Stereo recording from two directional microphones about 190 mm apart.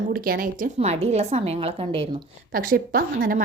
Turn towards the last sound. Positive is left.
turn(degrees=-50)  # may be behind; listen again after turning